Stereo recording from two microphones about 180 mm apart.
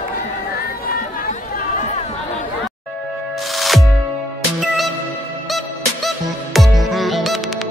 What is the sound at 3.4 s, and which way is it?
Music, centre (ahead or behind).